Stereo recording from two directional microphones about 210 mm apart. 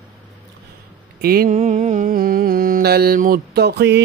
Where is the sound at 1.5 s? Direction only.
35° right (ahead or behind).